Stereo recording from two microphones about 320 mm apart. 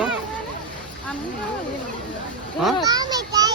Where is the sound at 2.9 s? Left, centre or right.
Centre.